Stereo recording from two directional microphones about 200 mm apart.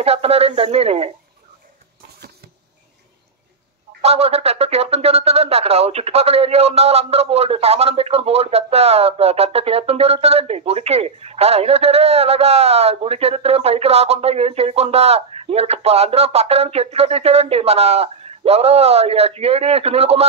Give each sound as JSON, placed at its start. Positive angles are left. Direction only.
{"t": 0.0, "sound": "speech", "side_deg": -30}
{"t": 4.0, "sound": "speech", "side_deg": -30}